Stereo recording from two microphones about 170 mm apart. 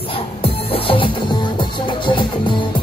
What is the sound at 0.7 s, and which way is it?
Music, 30° left (ahead or behind).